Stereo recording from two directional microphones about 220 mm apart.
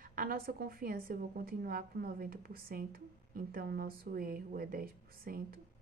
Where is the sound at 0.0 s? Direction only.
40° right (ahead or behind).